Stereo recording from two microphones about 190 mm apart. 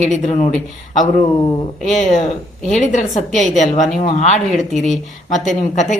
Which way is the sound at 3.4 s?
Centre (ahead or behind).